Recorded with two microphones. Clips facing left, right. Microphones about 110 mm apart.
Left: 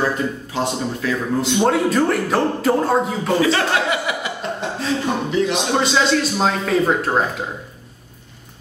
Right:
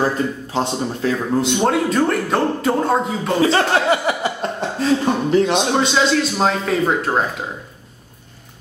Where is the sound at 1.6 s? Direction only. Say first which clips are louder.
Left 2 dB; centre (ahead or behind).